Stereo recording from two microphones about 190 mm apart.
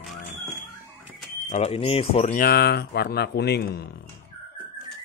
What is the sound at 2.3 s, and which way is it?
Speech, 55° left (ahead or behind).